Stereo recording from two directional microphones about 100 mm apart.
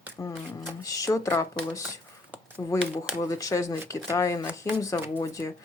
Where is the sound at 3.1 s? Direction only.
35° left (ahead or behind).